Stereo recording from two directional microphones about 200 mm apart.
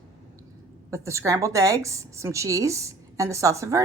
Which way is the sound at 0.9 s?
15° right (ahead or behind).